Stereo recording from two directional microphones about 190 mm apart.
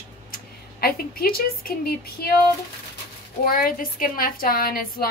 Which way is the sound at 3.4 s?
50° left (ahead or behind).